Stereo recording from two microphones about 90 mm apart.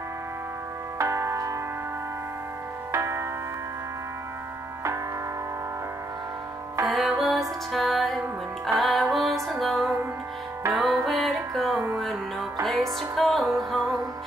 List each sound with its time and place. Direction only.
0.9 s music: 30° right (ahead or behind)
2.9 s music: 30° right (ahead or behind)
6.9 s music: centre (ahead or behind)